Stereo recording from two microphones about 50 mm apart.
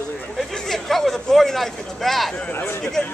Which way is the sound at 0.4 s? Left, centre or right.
Centre.